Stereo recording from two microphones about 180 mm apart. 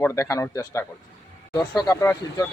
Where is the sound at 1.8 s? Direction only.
15° left (ahead or behind).